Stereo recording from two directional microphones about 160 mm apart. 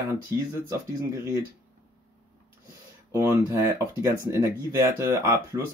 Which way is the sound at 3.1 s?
15° right (ahead or behind).